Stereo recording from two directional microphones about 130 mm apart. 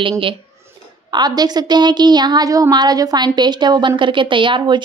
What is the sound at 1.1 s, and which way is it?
A woman's voice, 30° right (ahead or behind).